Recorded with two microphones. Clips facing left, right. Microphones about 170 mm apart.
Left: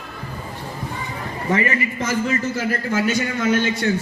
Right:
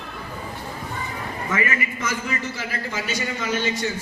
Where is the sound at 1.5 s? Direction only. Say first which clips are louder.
Left 5 dB; 35° left (ahead or behind).